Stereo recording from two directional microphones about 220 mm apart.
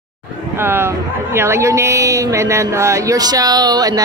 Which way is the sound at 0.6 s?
10° right (ahead or behind).